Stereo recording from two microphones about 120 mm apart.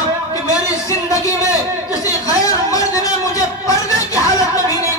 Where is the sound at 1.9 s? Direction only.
30° left (ahead or behind).